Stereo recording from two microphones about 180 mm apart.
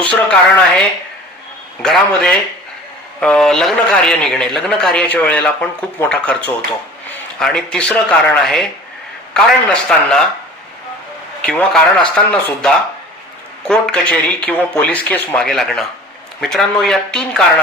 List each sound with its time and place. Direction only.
0.0 s a man's voice: 5° left (ahead or behind)
9.3 s a man's voice: 5° left (ahead or behind)
11.4 s a man's voice: 5° left (ahead or behind)